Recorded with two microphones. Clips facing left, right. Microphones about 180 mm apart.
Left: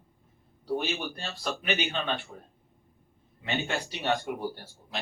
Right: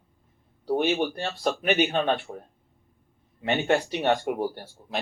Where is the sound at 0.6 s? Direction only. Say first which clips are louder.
Right 7 dB; 60° right (ahead or behind).